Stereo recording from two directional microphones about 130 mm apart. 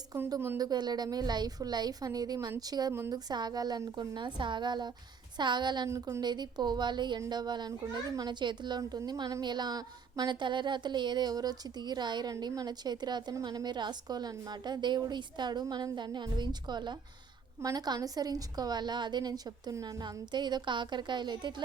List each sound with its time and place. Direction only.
0.1 s speech: 25° right (ahead or behind)
0.7 s a woman's voice: 35° right (ahead or behind)
5.9 s speech: 20° right (ahead or behind)
6.2 s a woman's voice: 35° right (ahead or behind)